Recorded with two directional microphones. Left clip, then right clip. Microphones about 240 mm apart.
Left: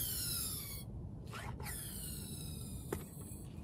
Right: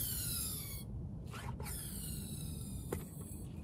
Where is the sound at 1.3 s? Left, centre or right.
Centre.